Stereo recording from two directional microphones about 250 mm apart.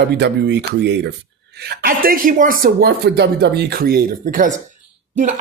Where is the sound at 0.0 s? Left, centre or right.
Right.